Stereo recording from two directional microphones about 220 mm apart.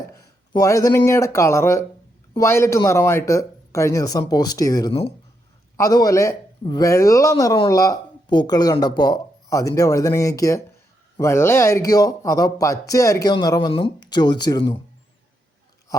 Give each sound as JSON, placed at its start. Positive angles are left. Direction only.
{"t": 0.2, "sound": "speech", "side_deg": 15}